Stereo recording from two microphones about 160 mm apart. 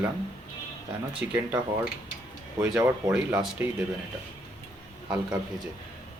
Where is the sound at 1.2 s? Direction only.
15° right (ahead or behind).